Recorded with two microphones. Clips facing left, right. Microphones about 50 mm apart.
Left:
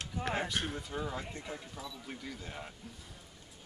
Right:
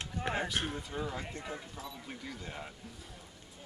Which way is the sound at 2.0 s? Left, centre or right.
Centre.